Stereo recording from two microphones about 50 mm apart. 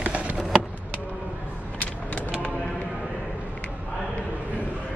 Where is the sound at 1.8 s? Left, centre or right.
Left.